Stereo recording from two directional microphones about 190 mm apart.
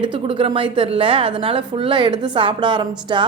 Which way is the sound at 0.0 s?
25° right (ahead or behind).